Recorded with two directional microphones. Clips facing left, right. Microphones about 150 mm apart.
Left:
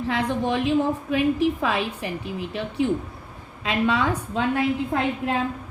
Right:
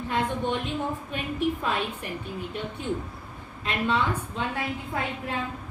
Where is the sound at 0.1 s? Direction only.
90° left.